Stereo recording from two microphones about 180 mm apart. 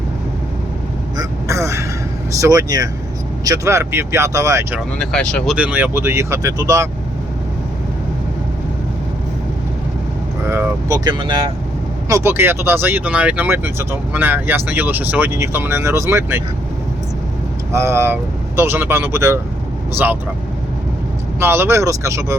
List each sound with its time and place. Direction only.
1.1 s a sound: 15° right (ahead or behind)
2.4 s speech: 20° right (ahead or behind)
4.9 s speech: 5° left (ahead or behind)
5.5 s speech: 10° right (ahead or behind)
10.5 s speech: 15° right (ahead or behind)
17.7 s speech: 15° right (ahead or behind)
21.3 s speech: 15° right (ahead or behind)